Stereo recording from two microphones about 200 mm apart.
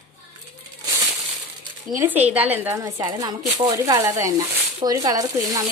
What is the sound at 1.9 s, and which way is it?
Speech, 10° right (ahead or behind).